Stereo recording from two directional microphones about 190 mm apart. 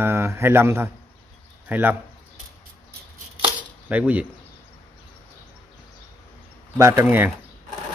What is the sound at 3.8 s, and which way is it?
Speech, 5° right (ahead or behind).